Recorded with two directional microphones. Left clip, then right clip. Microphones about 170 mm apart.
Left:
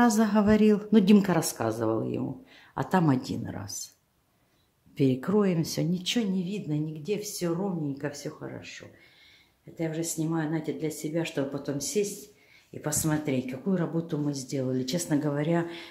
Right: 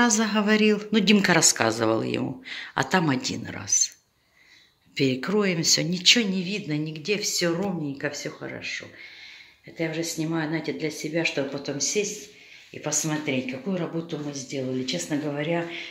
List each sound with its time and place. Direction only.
0.0 s speech: 20° left (ahead or behind)
1.2 s speech: 10° left (ahead or behind)
2.9 s speech: 15° left (ahead or behind)
4.9 s speech: 15° left (ahead or behind)